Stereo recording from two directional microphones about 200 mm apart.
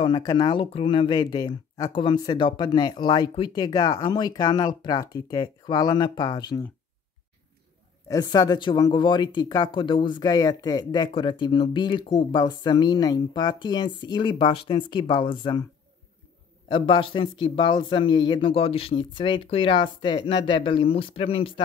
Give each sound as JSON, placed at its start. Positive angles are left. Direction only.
{"t": 0.0, "sound": "speech", "side_deg": 20}
{"t": 8.1, "sound": "speech", "side_deg": 20}
{"t": 16.6, "sound": "speech", "side_deg": 25}